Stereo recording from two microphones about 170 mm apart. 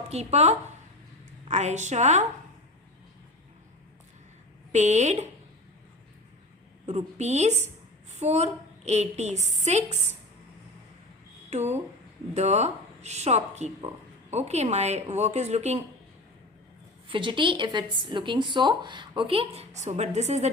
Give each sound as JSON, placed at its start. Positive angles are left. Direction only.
{"t": 0.1, "sound": "a woman's voice", "side_deg": -40}
{"t": 4.7, "sound": "a woman's voice", "side_deg": -45}
{"t": 6.8, "sound": "speech", "side_deg": -40}
{"t": 11.5, "sound": "speech", "side_deg": -40}
{"t": 17.1, "sound": "speech", "side_deg": -30}